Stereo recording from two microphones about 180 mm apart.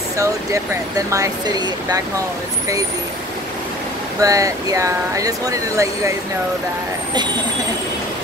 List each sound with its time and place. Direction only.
0.2 s speech: 15° right (ahead or behind)
4.2 s speech: 20° right (ahead or behind)